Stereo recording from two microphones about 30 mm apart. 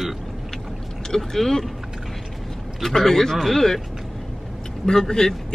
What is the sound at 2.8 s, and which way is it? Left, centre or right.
Speech, centre.